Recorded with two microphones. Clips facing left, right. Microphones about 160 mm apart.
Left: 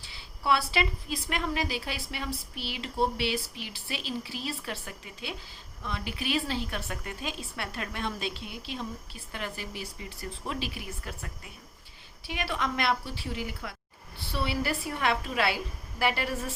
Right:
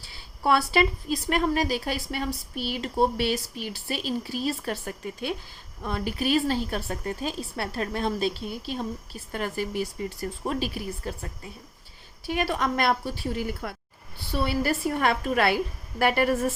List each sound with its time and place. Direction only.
0.0 s a woman's voice: 45° right (ahead or behind)
12.2 s a woman's voice: 45° right (ahead or behind)